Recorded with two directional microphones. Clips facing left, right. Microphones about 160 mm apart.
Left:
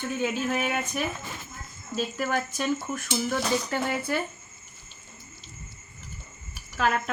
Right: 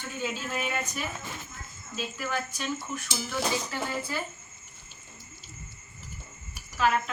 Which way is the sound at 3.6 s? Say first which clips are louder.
Left 5 dB; 60° left (ahead or behind).